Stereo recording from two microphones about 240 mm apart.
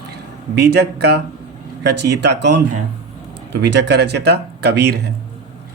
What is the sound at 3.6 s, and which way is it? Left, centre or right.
Speech, right.